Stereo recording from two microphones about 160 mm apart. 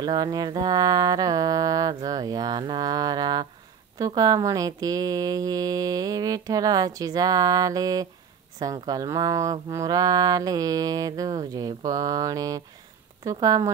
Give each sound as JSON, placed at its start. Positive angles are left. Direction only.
{"t": 0.0, "sound": "speech", "side_deg": -25}